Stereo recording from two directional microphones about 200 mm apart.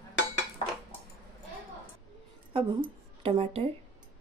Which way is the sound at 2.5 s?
25° right (ahead or behind).